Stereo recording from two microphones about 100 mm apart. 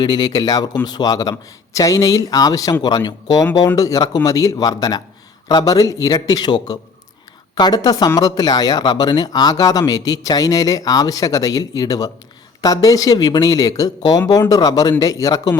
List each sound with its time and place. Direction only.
0.0 s speech: 45° left (ahead or behind)